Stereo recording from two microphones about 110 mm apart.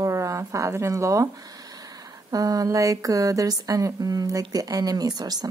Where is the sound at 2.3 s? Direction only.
35° right (ahead or behind).